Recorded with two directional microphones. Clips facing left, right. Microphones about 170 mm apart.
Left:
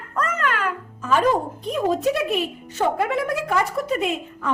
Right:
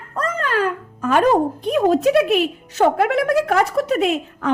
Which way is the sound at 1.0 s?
60° right (ahead or behind).